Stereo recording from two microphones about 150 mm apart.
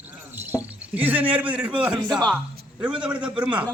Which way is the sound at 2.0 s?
25° right (ahead or behind).